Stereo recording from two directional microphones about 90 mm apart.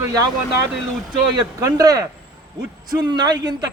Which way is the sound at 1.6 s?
45° right (ahead or behind).